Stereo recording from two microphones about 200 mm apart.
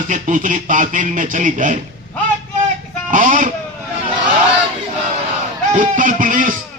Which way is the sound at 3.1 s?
40° right (ahead or behind).